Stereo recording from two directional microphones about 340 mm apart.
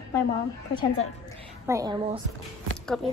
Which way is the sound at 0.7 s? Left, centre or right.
Centre.